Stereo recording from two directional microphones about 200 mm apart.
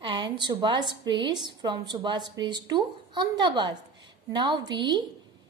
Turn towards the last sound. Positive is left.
turn(degrees=-20)  # may be behind; listen again after turning